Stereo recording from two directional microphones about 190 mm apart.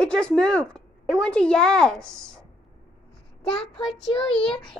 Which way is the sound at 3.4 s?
30° left (ahead or behind).